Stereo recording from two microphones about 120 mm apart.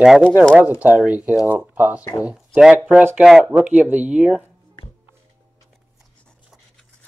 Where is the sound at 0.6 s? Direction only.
15° right (ahead or behind).